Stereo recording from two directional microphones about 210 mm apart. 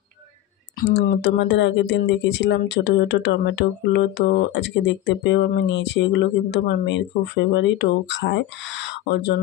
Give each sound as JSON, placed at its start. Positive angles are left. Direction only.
{"t": 0.7, "sound": "speech", "side_deg": 45}